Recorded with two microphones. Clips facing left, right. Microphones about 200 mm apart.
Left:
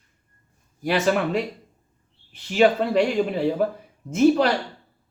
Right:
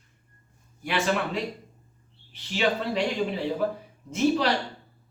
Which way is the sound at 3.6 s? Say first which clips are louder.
Left 4 dB; 50° left (ahead or behind).